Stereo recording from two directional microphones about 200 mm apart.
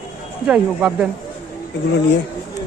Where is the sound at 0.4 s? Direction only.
5° right (ahead or behind).